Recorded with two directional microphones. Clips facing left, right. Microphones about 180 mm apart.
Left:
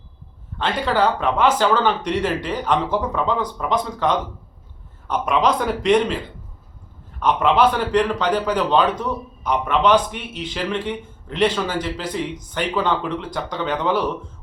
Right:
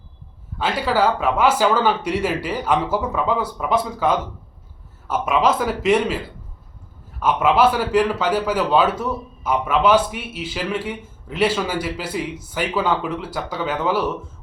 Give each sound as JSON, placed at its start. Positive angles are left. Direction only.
{"t": 0.6, "sound": "a man's voice", "side_deg": -5}
{"t": 7.2, "sound": "speech", "side_deg": -5}